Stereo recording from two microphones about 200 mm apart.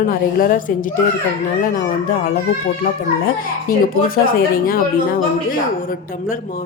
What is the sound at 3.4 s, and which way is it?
Speech, 45° left (ahead or behind).